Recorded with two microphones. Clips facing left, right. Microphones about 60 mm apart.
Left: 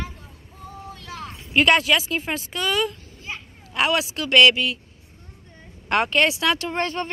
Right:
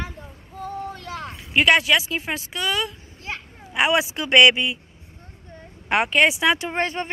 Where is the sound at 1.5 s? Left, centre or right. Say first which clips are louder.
Even; centre.